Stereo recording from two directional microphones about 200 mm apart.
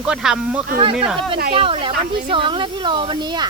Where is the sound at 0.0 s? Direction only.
5° right (ahead or behind).